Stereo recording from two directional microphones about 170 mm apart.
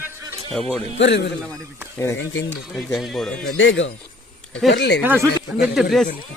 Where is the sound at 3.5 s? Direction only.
90° left.